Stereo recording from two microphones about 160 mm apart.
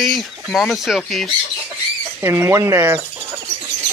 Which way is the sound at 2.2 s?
15° right (ahead or behind).